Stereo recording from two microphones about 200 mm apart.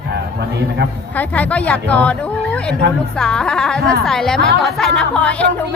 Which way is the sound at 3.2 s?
5° left (ahead or behind).